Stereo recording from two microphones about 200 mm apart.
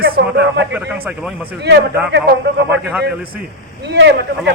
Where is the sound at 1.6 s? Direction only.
60° right (ahead or behind).